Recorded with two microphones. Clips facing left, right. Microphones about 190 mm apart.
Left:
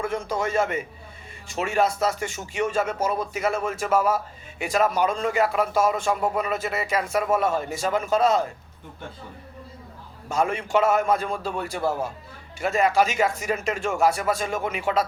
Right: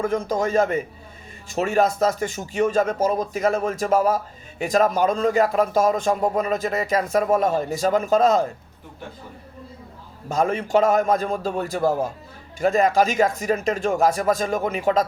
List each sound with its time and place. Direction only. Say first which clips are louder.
0.0 s speech: right 4 dB; 40° right (ahead or behind)
10.2 s speech: right 3 dB; 40° right (ahead or behind)